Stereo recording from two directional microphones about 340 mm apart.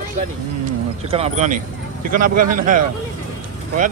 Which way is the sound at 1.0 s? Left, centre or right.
Centre.